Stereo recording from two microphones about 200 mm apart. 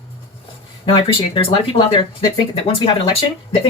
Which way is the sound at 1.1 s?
25° left (ahead or behind).